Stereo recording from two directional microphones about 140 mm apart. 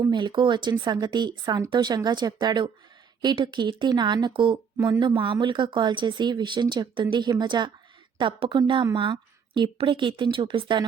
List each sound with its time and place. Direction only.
0.0 s a woman's voice: 30° right (ahead or behind)